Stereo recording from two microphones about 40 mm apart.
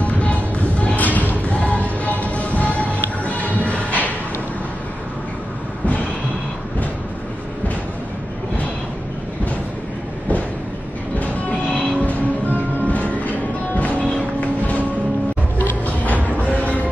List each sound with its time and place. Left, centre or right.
0.0 s a sound: left
1.5 s music: left
11.1 s train: left
12.0 s music: left
16.5 s music: left